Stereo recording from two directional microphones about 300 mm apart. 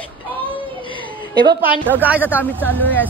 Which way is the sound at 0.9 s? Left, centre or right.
Centre.